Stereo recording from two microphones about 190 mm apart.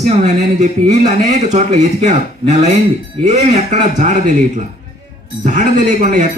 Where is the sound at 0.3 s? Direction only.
40° right (ahead or behind).